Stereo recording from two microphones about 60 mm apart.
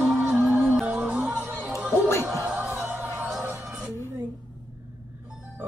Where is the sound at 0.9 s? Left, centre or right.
Centre.